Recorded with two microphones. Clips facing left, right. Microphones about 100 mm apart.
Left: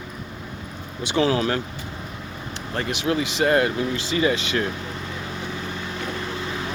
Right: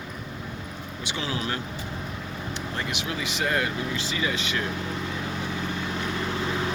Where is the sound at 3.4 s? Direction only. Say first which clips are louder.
Left 7 dB; 45° left (ahead or behind).